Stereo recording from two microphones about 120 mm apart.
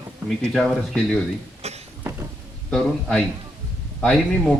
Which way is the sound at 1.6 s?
60° right (ahead or behind).